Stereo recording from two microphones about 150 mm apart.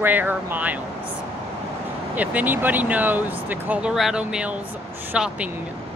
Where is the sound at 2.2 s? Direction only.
10° right (ahead or behind).